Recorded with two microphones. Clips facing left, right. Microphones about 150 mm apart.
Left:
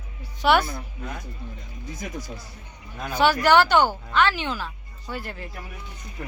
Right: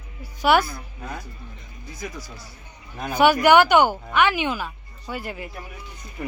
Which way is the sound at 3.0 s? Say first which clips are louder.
Right 3 dB; 15° right (ahead or behind).